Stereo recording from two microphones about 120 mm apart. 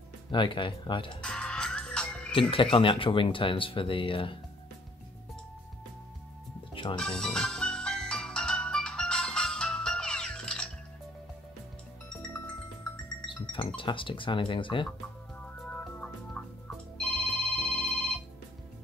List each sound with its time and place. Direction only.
0.3 s speech: 45° left (ahead or behind)
1.2 s music: 5° left (ahead or behind)
2.5 s speech: 45° left (ahead or behind)
6.7 s music: 45° left (ahead or behind)
7.0 s music: 5° left (ahead or behind)
13.3 s music: 45° left (ahead or behind)
13.7 s speech: 45° left (ahead or behind)
15.4 s music: 10° left (ahead or behind)
17.0 s telephone bell ringing: 5° left (ahead or behind)